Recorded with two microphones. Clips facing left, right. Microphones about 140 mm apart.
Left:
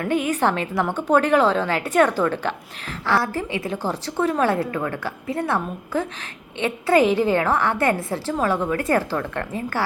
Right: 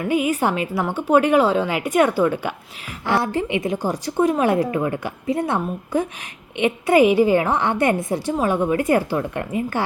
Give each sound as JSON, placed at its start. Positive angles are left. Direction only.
{"t": 0.0, "sound": "a woman's voice", "side_deg": -10}